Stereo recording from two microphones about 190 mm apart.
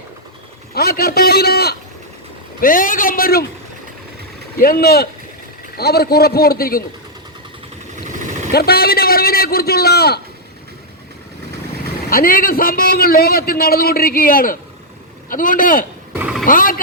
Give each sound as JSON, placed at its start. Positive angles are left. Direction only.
{"t": 0.7, "sound": "a man's voice", "side_deg": 55}
{"t": 4.6, "sound": "a man's voice", "side_deg": 50}
{"t": 8.5, "sound": "a man's voice", "side_deg": 55}
{"t": 12.1, "sound": "a man's voice", "side_deg": 50}
{"t": 16.1, "sound": "vehicle", "side_deg": -5}
{"t": 16.5, "sound": "speech", "side_deg": 50}